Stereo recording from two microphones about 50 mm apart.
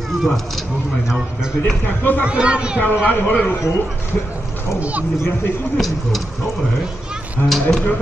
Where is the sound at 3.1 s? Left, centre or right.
Left.